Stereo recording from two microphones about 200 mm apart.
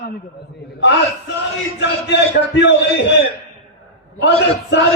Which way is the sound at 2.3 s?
60° left (ahead or behind).